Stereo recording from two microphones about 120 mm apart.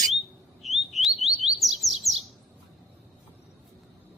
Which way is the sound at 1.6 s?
Centre (ahead or behind).